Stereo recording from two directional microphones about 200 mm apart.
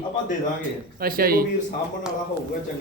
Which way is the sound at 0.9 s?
45° right (ahead or behind).